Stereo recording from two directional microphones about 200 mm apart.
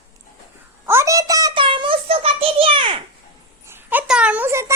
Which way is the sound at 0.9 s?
15° right (ahead or behind).